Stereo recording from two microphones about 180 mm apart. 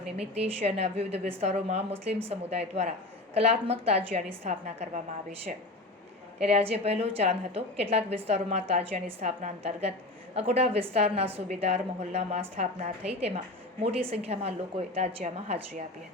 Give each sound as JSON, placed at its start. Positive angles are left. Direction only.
{"t": 0.2, "sound": "a woman's voice", "side_deg": -35}
{"t": 6.4, "sound": "a woman's voice", "side_deg": -35}